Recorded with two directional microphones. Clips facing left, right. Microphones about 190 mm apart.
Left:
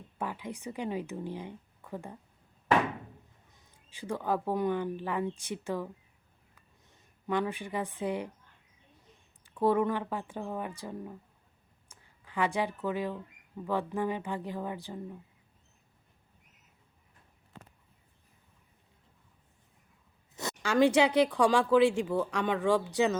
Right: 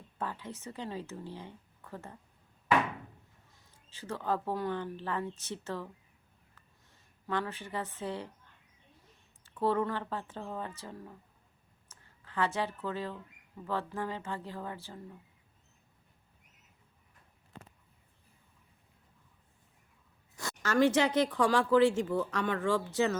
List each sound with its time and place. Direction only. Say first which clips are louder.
0.2 s speech: left 2 dB; 15° left (ahead or behind)
3.5 s speech: left 1 dB; 15° left (ahead or behind)
9.4 s speech: left 3 dB; 15° left (ahead or behind)
20.3 s speech: left 1 dB; 20° left (ahead or behind)